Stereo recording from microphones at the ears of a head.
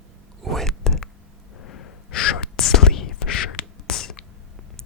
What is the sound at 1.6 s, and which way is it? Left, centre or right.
Whispering, left.